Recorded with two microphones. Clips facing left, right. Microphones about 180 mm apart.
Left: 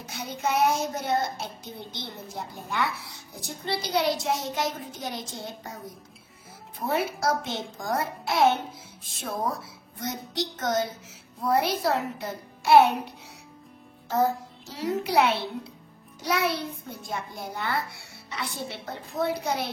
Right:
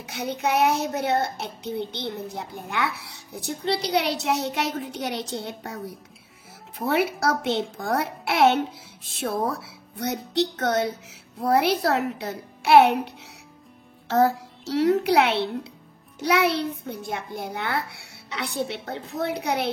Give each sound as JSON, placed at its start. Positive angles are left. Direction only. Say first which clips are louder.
{"t": 0.0, "sound": "a child's voice", "louder": "right 4 dB", "side_deg": -65}
{"t": 6.8, "sound": "a child's voice", "louder": "right 4 dB", "side_deg": -75}
{"t": 14.0, "sound": "a child's voice", "louder": "right 4 dB", "side_deg": -80}